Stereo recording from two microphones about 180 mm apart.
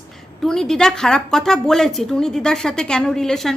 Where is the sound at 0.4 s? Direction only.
Centre (ahead or behind).